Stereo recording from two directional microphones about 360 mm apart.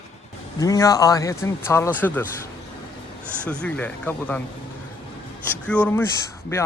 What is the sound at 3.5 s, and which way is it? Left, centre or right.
Speech, centre.